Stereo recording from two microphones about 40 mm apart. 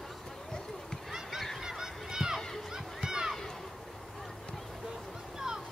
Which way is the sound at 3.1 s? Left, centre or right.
Centre.